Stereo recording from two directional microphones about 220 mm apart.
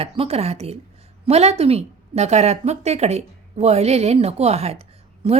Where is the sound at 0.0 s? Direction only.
25° right (ahead or behind).